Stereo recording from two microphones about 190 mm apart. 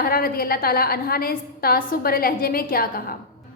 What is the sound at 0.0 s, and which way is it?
A woman's voice, 50° left (ahead or behind).